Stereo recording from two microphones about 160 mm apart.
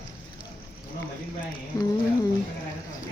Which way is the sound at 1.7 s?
25° left (ahead or behind).